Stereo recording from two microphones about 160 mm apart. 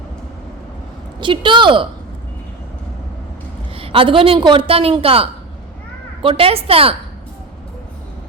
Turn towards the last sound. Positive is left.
turn(degrees=-35)  # may be behind; listen again after turning